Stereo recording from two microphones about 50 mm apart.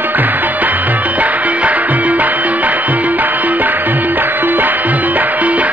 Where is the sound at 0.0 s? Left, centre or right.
Right.